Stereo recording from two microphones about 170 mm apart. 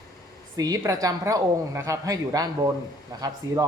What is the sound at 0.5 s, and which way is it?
A woman's voice, 20° right (ahead or behind).